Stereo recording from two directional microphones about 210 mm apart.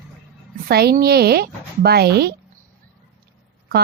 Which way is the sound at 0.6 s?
50° right (ahead or behind).